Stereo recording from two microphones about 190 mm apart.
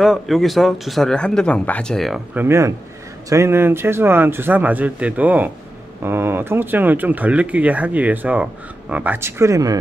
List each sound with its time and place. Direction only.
0.0 s speech: centre (ahead or behind)
2.4 s speech: 15° right (ahead or behind)